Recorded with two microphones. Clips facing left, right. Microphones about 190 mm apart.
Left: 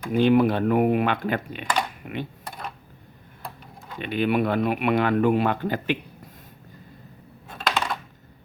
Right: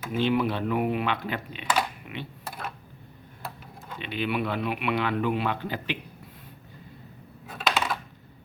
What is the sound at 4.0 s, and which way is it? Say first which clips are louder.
Speech: left 6 dB; 50° left (ahead or behind).